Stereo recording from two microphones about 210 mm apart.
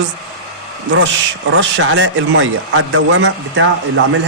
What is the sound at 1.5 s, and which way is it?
A man's voice, 60° right (ahead or behind).